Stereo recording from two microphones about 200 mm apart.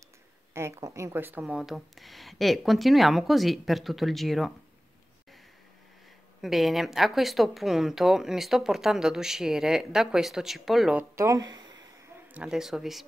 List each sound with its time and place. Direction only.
0.6 s a woman's voice: 15° right (ahead or behind)
6.4 s a woman's voice: centre (ahead or behind)
11.1 s speech: 15° right (ahead or behind)
12.4 s a woman's voice: 5° right (ahead or behind)